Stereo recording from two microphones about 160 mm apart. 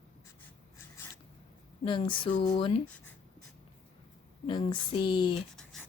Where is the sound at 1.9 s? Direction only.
30° left (ahead or behind).